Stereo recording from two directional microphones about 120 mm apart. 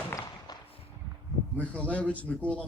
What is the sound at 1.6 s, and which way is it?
A man's voice, 10° left (ahead or behind).